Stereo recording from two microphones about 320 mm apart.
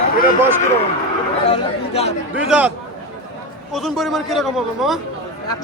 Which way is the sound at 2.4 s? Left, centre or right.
Centre.